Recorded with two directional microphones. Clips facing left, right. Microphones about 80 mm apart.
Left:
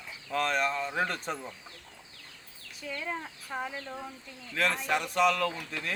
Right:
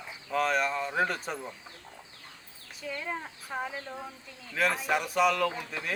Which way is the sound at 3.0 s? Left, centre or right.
Centre.